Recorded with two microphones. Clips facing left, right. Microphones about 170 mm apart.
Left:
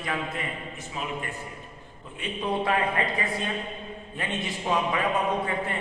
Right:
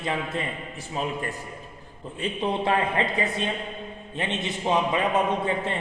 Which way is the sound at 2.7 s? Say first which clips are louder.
Right 3 dB; 25° right (ahead or behind).